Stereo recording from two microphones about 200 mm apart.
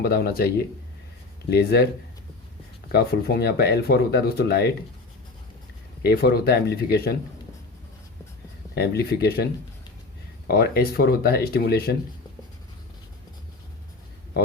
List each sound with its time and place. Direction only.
0.0 s speech: 50° left (ahead or behind)
2.9 s speech: 50° left (ahead or behind)
6.0 s speech: 50° left (ahead or behind)
8.7 s speech: 50° left (ahead or behind)